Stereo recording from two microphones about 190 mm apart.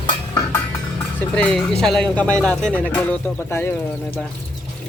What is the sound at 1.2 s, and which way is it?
Speech, 5° left (ahead or behind).